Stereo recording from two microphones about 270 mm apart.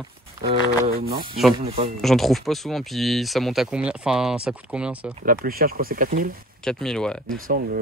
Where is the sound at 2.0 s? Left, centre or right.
Centre.